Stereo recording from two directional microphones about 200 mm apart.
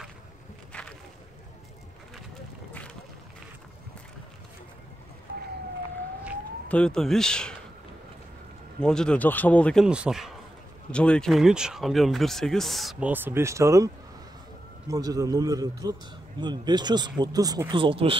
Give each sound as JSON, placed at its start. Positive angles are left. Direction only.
{"t": 0.7, "sound": "a sound", "side_deg": 5}
{"t": 6.7, "sound": "speech", "side_deg": 5}
{"t": 8.8, "sound": "a man's voice", "side_deg": 5}